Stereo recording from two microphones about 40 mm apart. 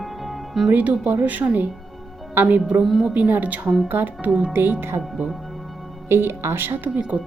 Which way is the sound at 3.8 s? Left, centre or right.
Right.